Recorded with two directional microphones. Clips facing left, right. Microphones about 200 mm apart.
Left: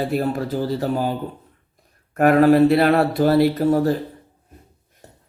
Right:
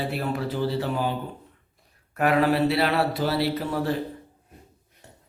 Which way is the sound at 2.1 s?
45° left (ahead or behind).